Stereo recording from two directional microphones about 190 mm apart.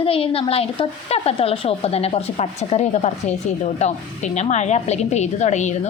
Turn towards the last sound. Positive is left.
turn(degrees=40)  # may be behind; listen again after turning